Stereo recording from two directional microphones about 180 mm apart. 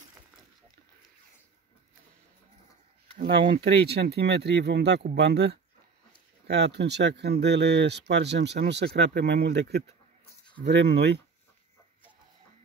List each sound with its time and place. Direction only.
3.2 s speech: 65° right (ahead or behind)